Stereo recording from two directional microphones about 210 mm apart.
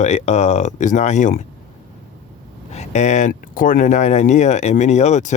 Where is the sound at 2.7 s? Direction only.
35° left (ahead or behind).